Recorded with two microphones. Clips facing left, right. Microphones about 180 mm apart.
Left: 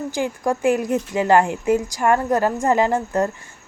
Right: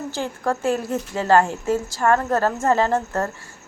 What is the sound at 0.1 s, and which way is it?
A woman's voice, 15° left (ahead or behind).